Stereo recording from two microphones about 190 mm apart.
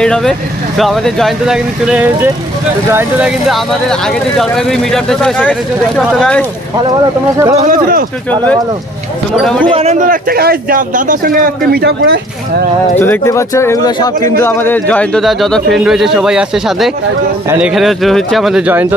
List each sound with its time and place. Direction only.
0.0 s speech: 5° left (ahead or behind); by 3.3 s 10° right (ahead or behind)
3.4 s speech: centre (ahead or behind)
6.8 s speech: 20° right (ahead or behind)
7.5 s speech: 45° right (ahead or behind)
9.4 s speech: 5° left (ahead or behind)
9.7 s speech: 30° right (ahead or behind)
9.9 s speech: 45° right (ahead or behind)
13.0 s speech: 15° left (ahead or behind); by 18.9 s 10° right (ahead or behind)